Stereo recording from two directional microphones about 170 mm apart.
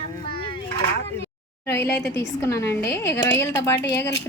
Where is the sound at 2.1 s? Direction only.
20° left (ahead or behind).